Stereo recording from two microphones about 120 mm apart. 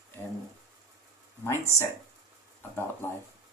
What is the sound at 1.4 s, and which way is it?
Speech, 20° left (ahead or behind).